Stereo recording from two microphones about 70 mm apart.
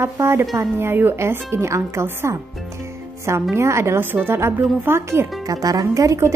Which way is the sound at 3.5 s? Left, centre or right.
Right.